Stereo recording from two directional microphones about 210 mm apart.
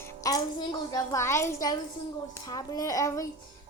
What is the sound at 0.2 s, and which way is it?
A child's voice, 15° left (ahead or behind).